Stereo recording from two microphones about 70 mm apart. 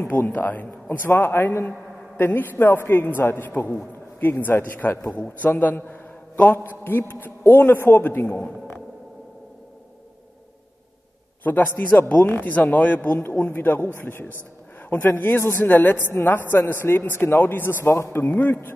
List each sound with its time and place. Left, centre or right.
0.0 s a man's voice: left
11.4 s a man's voice: left
17.8 s a man's voice: left
18.2 s a man's voice: left